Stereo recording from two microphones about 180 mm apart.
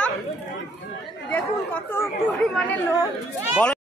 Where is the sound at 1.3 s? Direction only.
10° left (ahead or behind).